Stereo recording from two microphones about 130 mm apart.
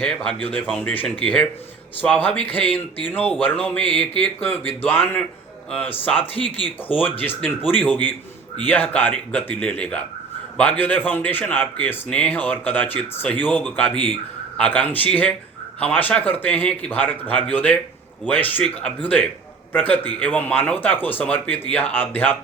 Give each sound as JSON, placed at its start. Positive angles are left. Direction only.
{"t": 0.0, "sound": "speech", "side_deg": 5}
{"t": 6.3, "sound": "speech", "side_deg": 45}
{"t": 6.8, "sound": "speech", "side_deg": 15}